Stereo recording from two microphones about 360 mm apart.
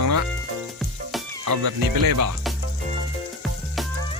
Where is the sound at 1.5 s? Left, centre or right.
Right.